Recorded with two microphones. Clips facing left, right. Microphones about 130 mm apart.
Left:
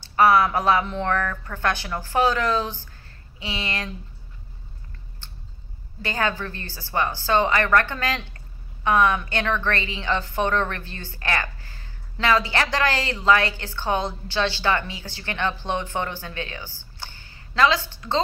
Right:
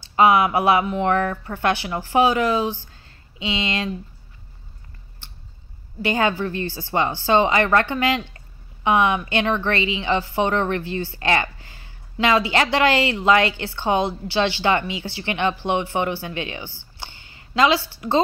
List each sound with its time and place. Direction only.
0.1 s a woman's voice: 15° right (ahead or behind)
6.0 s a woman's voice: 15° right (ahead or behind)